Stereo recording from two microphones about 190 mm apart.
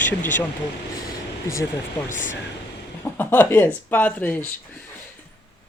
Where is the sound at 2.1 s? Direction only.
45° left (ahead or behind).